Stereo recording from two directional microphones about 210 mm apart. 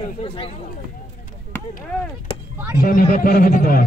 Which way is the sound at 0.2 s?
25° left (ahead or behind).